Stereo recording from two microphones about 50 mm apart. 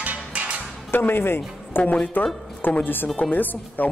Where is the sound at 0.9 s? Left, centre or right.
Left.